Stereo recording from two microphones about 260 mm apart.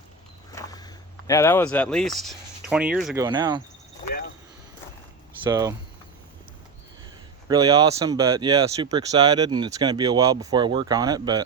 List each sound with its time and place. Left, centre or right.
0.5 s speech: centre
3.2 s speech: centre
5.5 s speech: centre
7.4 s speech: centre